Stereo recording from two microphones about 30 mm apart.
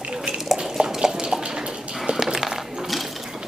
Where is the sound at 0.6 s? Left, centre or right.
Right.